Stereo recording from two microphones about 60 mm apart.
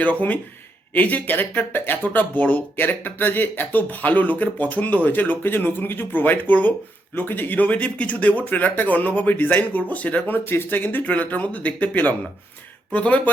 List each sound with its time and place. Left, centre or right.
0.0 s speech: left